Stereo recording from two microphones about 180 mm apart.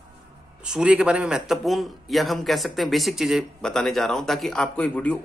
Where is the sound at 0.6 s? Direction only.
5° right (ahead or behind).